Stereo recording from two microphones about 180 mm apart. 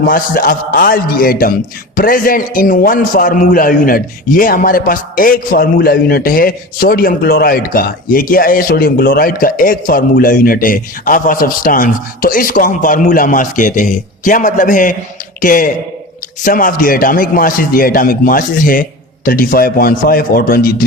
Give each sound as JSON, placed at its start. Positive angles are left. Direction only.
{"t": 0.0, "sound": "a man's voice", "side_deg": 55}